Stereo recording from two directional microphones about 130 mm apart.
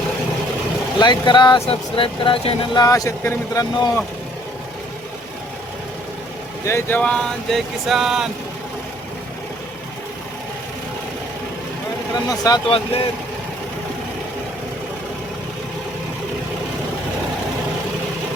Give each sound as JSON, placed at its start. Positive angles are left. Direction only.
{"t": 0.9, "sound": "speech", "side_deg": 35}
{"t": 2.7, "sound": "speech", "side_deg": 25}
{"t": 6.7, "sound": "a sound", "side_deg": 20}
{"t": 12.1, "sound": "speech", "side_deg": 30}